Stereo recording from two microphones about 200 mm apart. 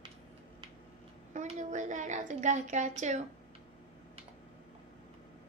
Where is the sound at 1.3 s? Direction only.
35° right (ahead or behind).